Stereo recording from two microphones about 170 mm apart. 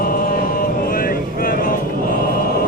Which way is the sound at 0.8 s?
55° left (ahead or behind).